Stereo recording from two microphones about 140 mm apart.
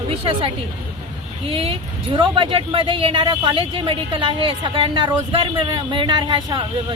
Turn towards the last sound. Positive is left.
turn(degrees=-35)  # may be behind; listen again after turning